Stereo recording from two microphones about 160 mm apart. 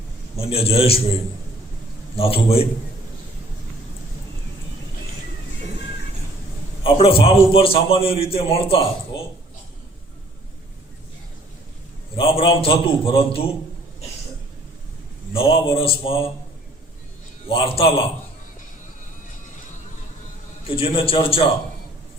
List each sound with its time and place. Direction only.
0.3 s a man's voice: 40° left (ahead or behind)
2.1 s a man's voice: 35° left (ahead or behind)
6.8 s a man's voice: 35° left (ahead or behind)
12.1 s a man's voice: 35° left (ahead or behind)
15.3 s a man's voice: 35° left (ahead or behind)
17.4 s a man's voice: 35° left (ahead or behind)
20.7 s a man's voice: 35° left (ahead or behind)